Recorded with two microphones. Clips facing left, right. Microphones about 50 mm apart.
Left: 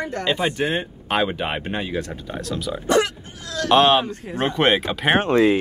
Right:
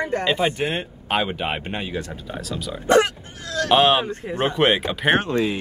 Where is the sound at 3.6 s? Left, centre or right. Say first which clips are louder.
Left 2 dB; centre.